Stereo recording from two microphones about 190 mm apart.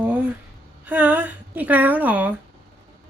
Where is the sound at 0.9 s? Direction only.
10° right (ahead or behind).